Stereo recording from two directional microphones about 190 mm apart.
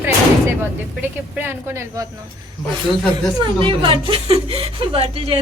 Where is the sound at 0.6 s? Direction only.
10° right (ahead or behind).